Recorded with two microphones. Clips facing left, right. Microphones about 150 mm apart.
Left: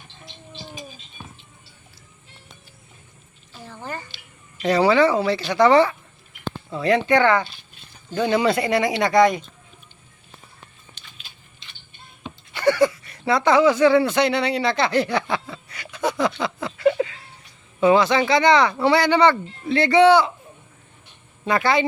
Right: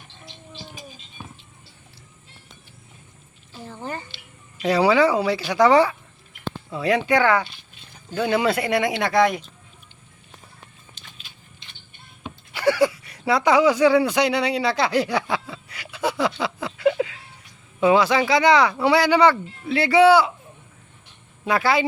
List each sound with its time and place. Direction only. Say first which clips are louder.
3.7 s a sound: right 1 dB; 20° right (ahead or behind)
4.5 s speech: left 1 dB; 10° right (ahead or behind)
12.2 s speech: left 1 dB; 10° right (ahead or behind)
21.4 s speech: left 1 dB; 5° right (ahead or behind)